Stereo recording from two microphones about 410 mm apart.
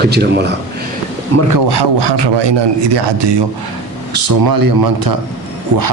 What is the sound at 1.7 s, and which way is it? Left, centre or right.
Speech, right.